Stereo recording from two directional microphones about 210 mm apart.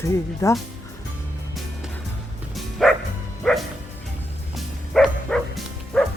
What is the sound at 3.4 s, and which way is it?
Music, centre (ahead or behind).